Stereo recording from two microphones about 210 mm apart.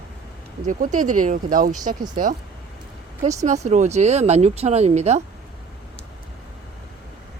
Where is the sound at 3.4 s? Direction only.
35° right (ahead or behind).